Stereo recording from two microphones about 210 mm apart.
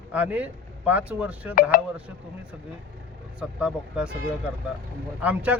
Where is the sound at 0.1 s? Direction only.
5° right (ahead or behind).